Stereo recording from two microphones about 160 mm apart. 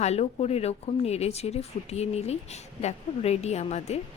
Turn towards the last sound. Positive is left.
turn(degrees=45)  # may be behind; listen again after turning